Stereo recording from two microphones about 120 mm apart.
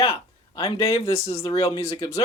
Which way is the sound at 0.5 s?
30° left (ahead or behind).